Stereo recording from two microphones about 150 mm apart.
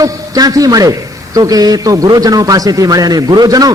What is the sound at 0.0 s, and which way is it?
A man's voice, 25° right (ahead or behind).